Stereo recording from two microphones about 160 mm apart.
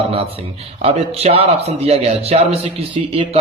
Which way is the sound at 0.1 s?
35° right (ahead or behind).